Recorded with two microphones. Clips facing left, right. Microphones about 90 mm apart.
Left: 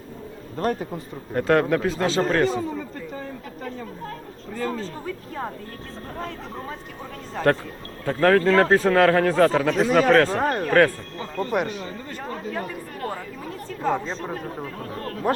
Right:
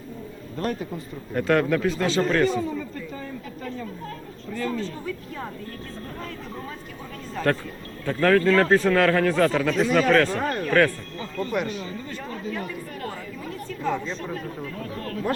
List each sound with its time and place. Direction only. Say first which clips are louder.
0.5 s a man's voice: left 3 dB; 35° left (ahead or behind)
4.5 s a man's voice: even; 40° left (ahead or behind)
8.0 s a man's voice: left 1 dB; 35° left (ahead or behind)